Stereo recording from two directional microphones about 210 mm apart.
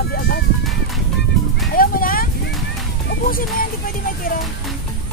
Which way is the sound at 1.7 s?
45° left (ahead or behind).